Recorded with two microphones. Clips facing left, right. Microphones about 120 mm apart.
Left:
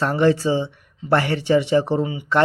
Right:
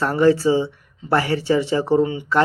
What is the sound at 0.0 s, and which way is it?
Speech, 20° left (ahead or behind).